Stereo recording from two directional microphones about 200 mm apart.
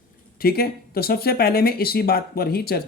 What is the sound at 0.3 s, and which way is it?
Speech, 50° left (ahead or behind).